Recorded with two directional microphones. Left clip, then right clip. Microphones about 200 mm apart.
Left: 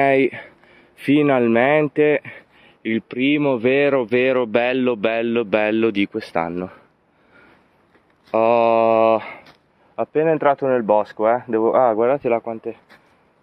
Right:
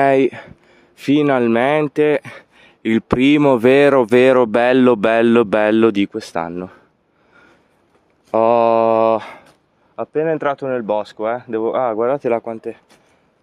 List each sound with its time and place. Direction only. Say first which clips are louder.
0.0 s speech: right 3 dB; 20° right (ahead or behind)
2.8 s speech: right 6 dB; 35° right (ahead or behind)
6.0 s speech: even; 10° right (ahead or behind)
8.3 s speech: right 2 dB; 25° right (ahead or behind)
9.9 s speech: left 1 dB; 5° right (ahead or behind)
12.1 s speech: right 1 dB; 20° right (ahead or behind)